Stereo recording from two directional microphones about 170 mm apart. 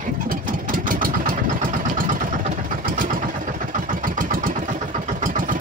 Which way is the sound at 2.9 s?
55° right (ahead or behind).